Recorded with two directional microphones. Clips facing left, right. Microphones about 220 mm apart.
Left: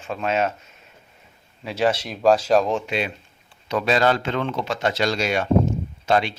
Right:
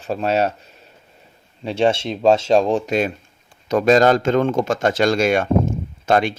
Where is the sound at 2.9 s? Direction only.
45° right (ahead or behind).